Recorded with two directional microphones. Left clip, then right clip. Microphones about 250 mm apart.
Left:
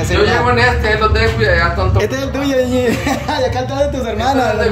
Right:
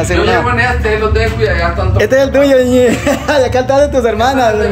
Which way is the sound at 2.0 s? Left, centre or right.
Centre.